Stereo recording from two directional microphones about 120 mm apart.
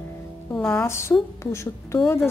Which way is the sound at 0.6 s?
20° left (ahead or behind).